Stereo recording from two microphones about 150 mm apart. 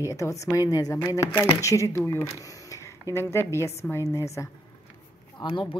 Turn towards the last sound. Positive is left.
turn(degrees=30)  # may be behind; listen again after turning